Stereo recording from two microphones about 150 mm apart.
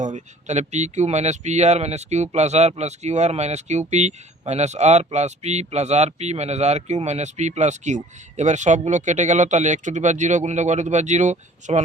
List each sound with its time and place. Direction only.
0.0 s speech: 50° right (ahead or behind)